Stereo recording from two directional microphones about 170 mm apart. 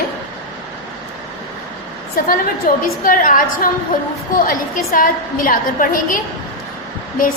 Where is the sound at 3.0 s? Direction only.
55° left (ahead or behind).